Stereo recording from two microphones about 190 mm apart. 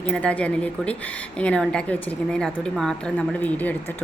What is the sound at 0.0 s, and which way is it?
A woman's voice, 5° left (ahead or behind).